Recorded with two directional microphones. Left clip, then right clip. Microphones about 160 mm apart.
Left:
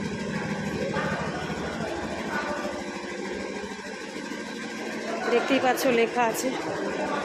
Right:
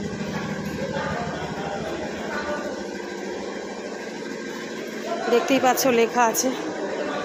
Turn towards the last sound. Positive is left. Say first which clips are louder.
# right 4 dB
turn(degrees=-20)  # may be behind; listen again after turning